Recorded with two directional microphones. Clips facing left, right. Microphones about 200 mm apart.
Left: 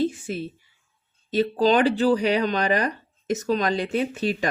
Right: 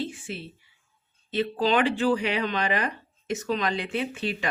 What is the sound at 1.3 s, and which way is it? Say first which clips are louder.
Speech: left 5 dB; 40° left (ahead or behind).